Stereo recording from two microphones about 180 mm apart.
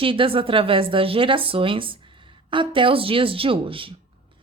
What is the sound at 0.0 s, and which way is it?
A woman's voice, 30° right (ahead or behind).